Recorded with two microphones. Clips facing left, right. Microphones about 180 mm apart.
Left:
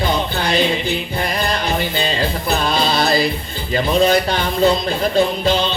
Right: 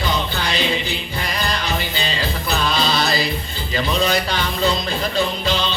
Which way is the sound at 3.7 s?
50° left (ahead or behind).